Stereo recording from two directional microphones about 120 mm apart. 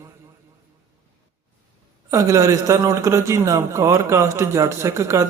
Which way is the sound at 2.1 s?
25° right (ahead or behind).